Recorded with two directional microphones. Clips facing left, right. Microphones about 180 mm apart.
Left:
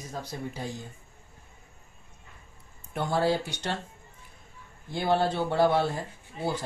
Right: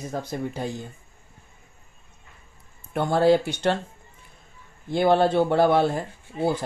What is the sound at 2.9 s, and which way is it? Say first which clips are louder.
Speech: right 7 dB; 60° right (ahead or behind).